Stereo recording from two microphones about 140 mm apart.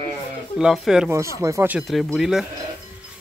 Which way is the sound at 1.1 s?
20° right (ahead or behind).